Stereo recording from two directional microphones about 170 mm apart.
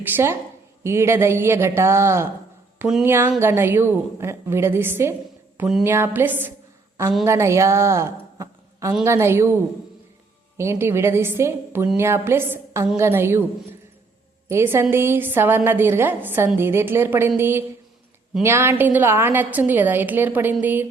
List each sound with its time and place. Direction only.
0.1 s a woman's voice: 15° right (ahead or behind)
10.6 s a woman's voice: 15° right (ahead or behind)
14.5 s a woman's voice: 15° right (ahead or behind)